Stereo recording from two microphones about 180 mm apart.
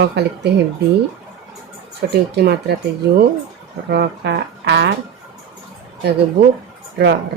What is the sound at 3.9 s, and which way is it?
Speech, 65° right (ahead or behind).